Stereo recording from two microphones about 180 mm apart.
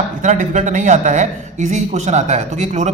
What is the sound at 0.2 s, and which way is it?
A man's voice, 45° right (ahead or behind).